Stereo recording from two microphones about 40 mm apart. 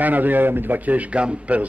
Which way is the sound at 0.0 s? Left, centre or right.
Right.